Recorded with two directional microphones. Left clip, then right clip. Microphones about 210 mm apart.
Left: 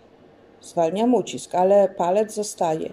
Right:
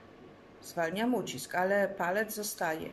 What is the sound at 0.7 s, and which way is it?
Speech, 20° left (ahead or behind).